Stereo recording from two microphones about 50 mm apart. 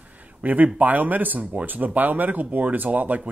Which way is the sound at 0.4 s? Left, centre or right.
Right.